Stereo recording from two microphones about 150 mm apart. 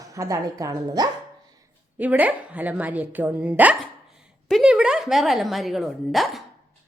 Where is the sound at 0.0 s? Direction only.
20° right (ahead or behind).